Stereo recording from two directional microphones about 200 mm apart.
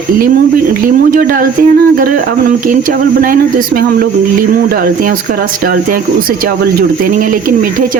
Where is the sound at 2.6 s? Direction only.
45° right (ahead or behind).